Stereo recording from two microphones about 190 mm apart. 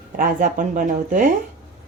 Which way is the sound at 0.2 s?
45° right (ahead or behind).